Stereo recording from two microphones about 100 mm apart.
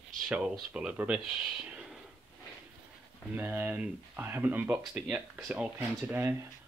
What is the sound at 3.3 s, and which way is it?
Speech, 20° right (ahead or behind).